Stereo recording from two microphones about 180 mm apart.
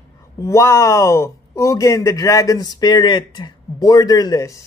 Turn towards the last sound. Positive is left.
turn(degrees=15)  # may be behind; listen again after turning